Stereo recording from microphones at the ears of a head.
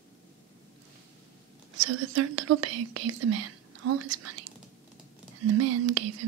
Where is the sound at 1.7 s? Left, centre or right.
Right.